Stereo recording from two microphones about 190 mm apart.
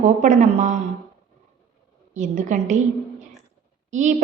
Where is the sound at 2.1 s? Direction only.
40° right (ahead or behind).